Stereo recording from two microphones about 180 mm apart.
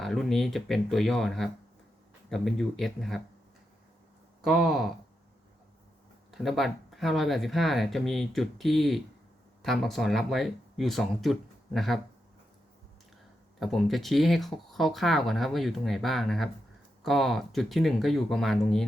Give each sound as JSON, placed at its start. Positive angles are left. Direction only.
{"t": 0.0, "sound": "speech", "side_deg": 0}
{"t": 4.4, "sound": "speech", "side_deg": 0}
{"t": 6.3, "sound": "speech", "side_deg": 0}
{"t": 13.6, "sound": "speech", "side_deg": 0}